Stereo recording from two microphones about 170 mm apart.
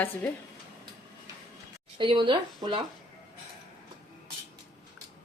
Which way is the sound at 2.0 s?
30° right (ahead or behind).